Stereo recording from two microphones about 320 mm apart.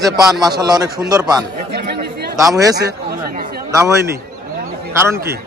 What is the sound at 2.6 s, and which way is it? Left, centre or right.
A man's voice, centre.